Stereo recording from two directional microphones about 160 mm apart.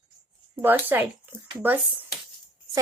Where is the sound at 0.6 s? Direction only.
10° right (ahead or behind).